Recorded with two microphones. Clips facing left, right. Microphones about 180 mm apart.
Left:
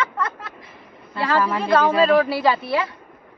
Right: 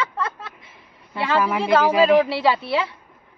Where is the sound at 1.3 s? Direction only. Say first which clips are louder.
Even; 10° right (ahead or behind).